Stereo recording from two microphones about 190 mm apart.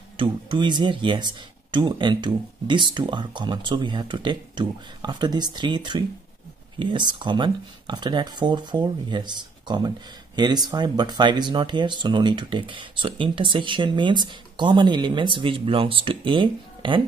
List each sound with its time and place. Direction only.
0.2 s speech: 25° right (ahead or behind)